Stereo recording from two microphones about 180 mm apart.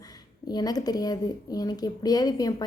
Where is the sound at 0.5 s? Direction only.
20° left (ahead or behind).